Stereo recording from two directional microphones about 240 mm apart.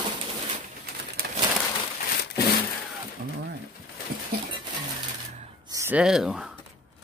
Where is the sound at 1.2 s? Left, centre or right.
Right.